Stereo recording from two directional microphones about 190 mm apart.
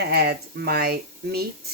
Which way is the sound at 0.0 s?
60° right (ahead or behind).